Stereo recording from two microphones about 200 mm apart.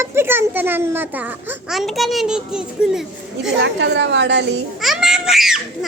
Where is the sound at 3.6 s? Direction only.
60° right (ahead or behind).